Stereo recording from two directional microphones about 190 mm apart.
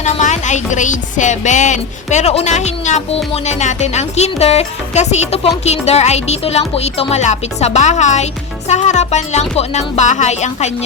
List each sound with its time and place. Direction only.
0.0 s speech: 40° left (ahead or behind)